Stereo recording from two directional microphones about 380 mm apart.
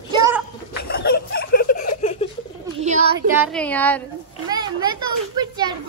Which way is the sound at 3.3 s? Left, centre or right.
Centre.